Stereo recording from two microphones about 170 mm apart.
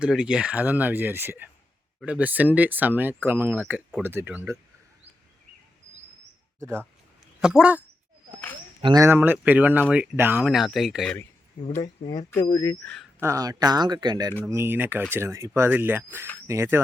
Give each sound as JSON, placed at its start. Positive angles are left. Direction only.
{"t": 0.0, "sound": "speech", "side_deg": -5}
{"t": 7.4, "sound": "speech", "side_deg": -5}
{"t": 8.8, "sound": "speech", "side_deg": -25}
{"t": 9.0, "sound": "speech", "side_deg": -10}
{"t": 11.8, "sound": "speech", "side_deg": 25}
{"t": 12.8, "sound": "speech", "side_deg": 5}
{"t": 13.1, "sound": "speech", "side_deg": -20}
{"t": 14.5, "sound": "speech", "side_deg": -15}